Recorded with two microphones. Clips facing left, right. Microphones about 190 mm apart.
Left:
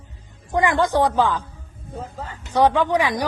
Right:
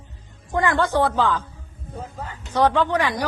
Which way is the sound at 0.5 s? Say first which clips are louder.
Left 1 dB; 15° left (ahead or behind).